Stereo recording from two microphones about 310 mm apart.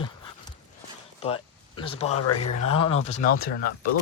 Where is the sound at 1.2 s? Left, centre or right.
Centre.